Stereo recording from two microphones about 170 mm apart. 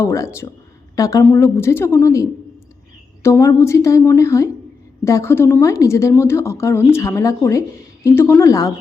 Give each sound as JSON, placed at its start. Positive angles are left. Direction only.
{"t": 0.0, "sound": "a woman's voice", "side_deg": 15}
{"t": 3.2, "sound": "a woman's voice", "side_deg": 15}